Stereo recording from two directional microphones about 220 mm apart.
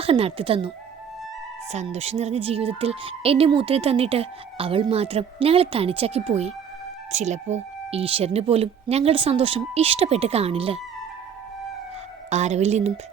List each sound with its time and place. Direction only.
0.0 s a woman's voice: 25° right (ahead or behind)
1.7 s a woman's voice: 30° right (ahead or behind)
12.3 s a woman's voice: 30° right (ahead or behind)